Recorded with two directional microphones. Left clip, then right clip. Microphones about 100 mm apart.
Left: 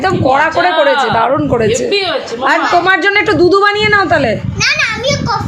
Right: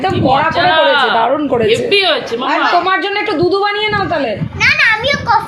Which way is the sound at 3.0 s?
90° left.